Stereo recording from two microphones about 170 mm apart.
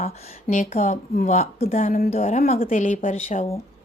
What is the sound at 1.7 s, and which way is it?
A woman's voice, 55° left (ahead or behind).